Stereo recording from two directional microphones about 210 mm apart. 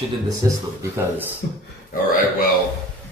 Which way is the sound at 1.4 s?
50° left (ahead or behind).